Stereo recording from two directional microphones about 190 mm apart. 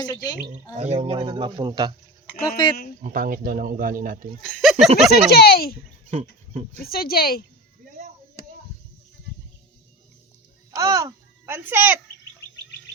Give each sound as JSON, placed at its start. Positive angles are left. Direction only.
{"t": 0.0, "sound": "speech", "side_deg": 20}
{"t": 0.8, "sound": "speech", "side_deg": -30}
{"t": 3.0, "sound": "speech", "side_deg": -45}
{"t": 4.4, "sound": "speech", "side_deg": 0}
{"t": 5.3, "sound": "speech", "side_deg": 55}
{"t": 6.1, "sound": "speech", "side_deg": -30}
{"t": 6.8, "sound": "speech", "side_deg": 50}
{"t": 10.8, "sound": "a child's voice", "side_deg": -20}